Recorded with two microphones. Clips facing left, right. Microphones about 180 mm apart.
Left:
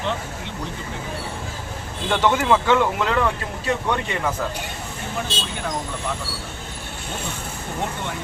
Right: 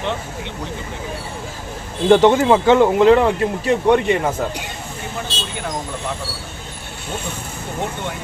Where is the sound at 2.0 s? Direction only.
30° right (ahead or behind).